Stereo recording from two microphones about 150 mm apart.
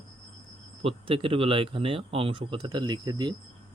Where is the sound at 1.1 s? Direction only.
35° right (ahead or behind).